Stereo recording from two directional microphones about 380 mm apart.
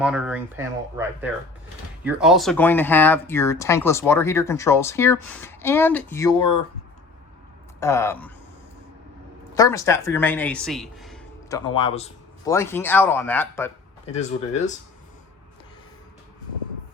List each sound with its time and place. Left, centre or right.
0.0 s speech: centre
7.8 s speech: centre
9.6 s speech: centre
14.2 s speech: centre